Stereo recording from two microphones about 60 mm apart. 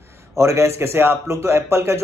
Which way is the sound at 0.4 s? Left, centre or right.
Right.